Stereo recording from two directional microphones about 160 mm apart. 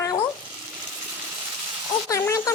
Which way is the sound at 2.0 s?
20° left (ahead or behind).